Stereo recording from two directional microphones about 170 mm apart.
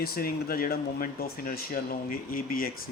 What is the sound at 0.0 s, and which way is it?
Speech, 60° left (ahead or behind).